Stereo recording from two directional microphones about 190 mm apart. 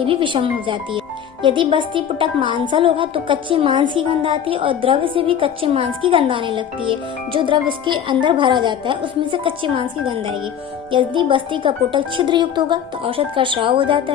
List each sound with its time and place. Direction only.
0.0 s a woman's voice: 25° right (ahead or behind)